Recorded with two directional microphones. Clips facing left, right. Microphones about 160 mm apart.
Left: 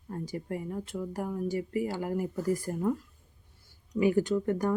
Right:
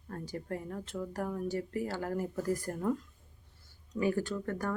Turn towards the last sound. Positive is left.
turn(degrees=20)  # may be behind; listen again after turning